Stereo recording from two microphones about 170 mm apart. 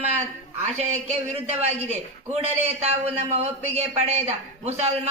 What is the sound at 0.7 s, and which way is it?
Speech, 40° right (ahead or behind).